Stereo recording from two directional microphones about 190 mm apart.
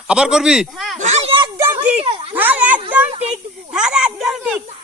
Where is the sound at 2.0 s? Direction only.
30° right (ahead or behind).